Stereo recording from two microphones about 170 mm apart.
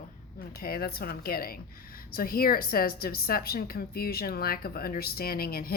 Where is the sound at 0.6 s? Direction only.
65° left (ahead or behind).